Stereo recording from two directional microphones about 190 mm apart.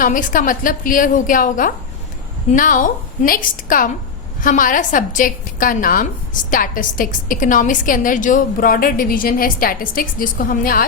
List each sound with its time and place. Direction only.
0.0 s a woman's voice: 45° left (ahead or behind)